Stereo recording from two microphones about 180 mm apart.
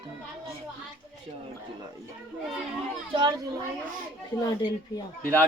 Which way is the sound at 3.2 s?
25° right (ahead or behind).